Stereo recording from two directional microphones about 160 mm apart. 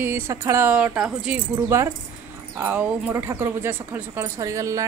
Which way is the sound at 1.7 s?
15° right (ahead or behind).